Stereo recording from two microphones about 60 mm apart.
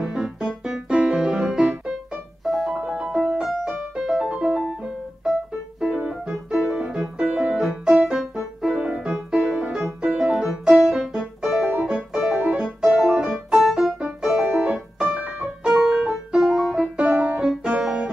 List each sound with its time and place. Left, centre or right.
0.0 s keyboard: centre
2.4 s music: centre
4.3 s music: centre
5.9 s piano: centre
8.1 s music: centre
8.7 s piano: right
9.0 s music: centre
16.8 s music: right
17.4 s music: centre